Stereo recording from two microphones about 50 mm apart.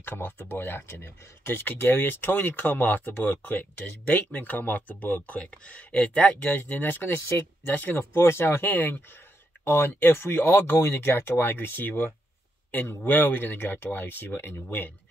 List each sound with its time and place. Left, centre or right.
0.0 s speech: left
6.4 s speech: left
8.0 s speech: left
8.6 s speech: left